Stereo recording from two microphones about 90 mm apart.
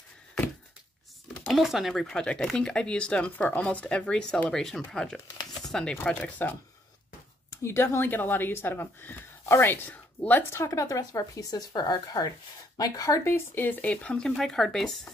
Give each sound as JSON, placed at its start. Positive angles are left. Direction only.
{"t": 1.5, "sound": "speech", "side_deg": -5}
{"t": 7.6, "sound": "speech", "side_deg": 25}
{"t": 10.5, "sound": "speech", "side_deg": 30}
{"t": 13.3, "sound": "speech", "side_deg": 20}